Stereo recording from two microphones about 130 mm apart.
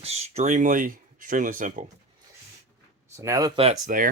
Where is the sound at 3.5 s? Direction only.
50° right (ahead or behind).